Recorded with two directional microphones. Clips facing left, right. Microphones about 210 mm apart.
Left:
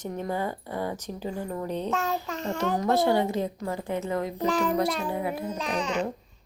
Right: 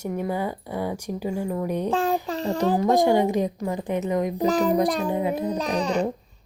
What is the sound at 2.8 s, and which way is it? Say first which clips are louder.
A woman's voice: right 3 dB; 15° right (ahead or behind).